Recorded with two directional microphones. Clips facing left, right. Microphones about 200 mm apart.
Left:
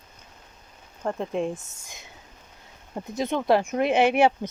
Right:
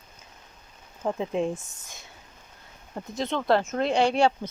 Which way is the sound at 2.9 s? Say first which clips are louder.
Left 2 dB; 15° left (ahead or behind).